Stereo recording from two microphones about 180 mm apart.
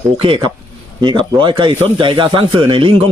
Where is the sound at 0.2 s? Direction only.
30° right (ahead or behind).